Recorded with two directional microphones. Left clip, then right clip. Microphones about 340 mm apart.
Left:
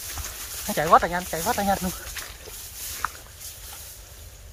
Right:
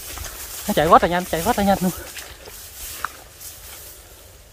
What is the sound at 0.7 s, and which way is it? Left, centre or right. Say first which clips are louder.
Speech: right 5 dB; right.